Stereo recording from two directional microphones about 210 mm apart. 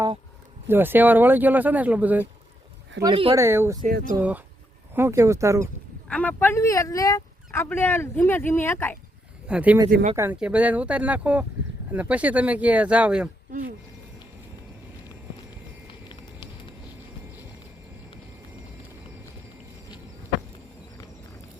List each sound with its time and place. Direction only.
0.7 s speech: 10° right (ahead or behind)
3.0 s speech: 25° right (ahead or behind)
3.3 s speech: 10° right (ahead or behind)
6.1 s speech: 5° left (ahead or behind)
9.5 s speech: 5° right (ahead or behind)
13.5 s speech: 40° right (ahead or behind)
15.9 s clip-clop: 25° left (ahead or behind)